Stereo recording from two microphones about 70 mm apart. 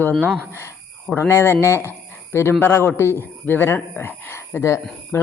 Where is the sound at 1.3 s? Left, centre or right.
Left.